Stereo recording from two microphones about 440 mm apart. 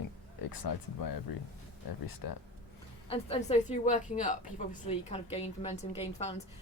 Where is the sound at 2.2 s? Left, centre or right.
Left.